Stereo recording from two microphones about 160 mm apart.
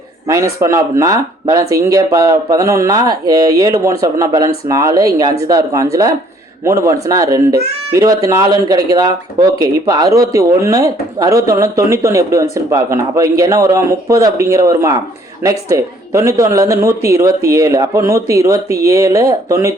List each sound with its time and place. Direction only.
0.3 s speech: 20° right (ahead or behind)